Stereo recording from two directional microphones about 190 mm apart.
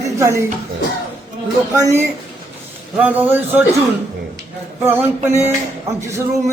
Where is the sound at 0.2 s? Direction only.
15° right (ahead or behind).